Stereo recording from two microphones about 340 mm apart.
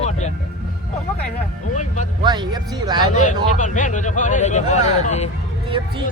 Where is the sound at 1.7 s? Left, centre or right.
Left.